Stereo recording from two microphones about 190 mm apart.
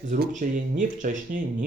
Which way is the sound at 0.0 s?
40° right (ahead or behind).